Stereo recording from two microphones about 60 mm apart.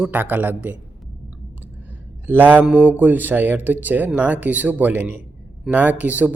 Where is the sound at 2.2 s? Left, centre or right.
Right.